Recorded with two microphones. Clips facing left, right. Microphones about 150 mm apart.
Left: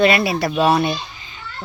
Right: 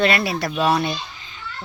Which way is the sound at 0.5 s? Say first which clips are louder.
Left 3 dB; 30° left (ahead or behind).